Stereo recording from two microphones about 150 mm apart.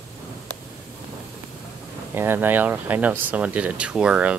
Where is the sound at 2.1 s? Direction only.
15° right (ahead or behind).